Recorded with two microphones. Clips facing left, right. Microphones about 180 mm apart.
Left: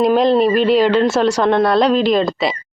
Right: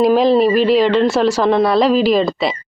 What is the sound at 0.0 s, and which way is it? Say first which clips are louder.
A woman's voice: right 1 dB; centre (ahead or behind).